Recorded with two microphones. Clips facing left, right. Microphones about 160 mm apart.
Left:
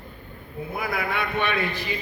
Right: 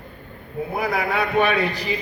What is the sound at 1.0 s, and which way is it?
Speech, 35° right (ahead or behind).